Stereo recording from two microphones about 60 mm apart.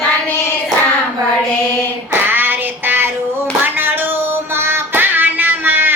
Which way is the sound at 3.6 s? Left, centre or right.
Right.